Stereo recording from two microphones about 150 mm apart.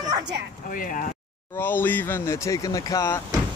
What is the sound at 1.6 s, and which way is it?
Speech, 15° left (ahead or behind).